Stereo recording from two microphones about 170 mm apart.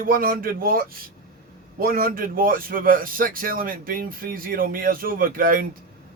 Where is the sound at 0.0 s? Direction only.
55° right (ahead or behind).